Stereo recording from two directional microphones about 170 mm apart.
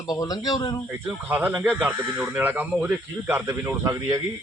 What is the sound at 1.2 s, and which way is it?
Speech, 10° right (ahead or behind).